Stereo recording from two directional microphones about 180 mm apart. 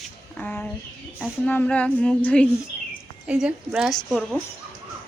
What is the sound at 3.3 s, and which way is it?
A woman's voice, 5° right (ahead or behind).